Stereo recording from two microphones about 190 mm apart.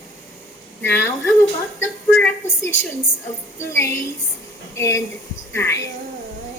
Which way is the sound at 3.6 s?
15° left (ahead or behind).